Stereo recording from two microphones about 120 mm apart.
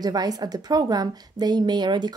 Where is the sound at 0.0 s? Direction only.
35° right (ahead or behind).